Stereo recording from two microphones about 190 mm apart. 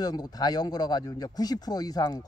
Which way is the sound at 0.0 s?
20° left (ahead or behind).